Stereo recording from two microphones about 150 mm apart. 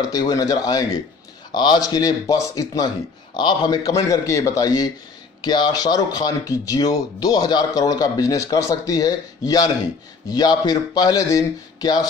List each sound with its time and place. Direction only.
0.0 s speech: 25° left (ahead or behind)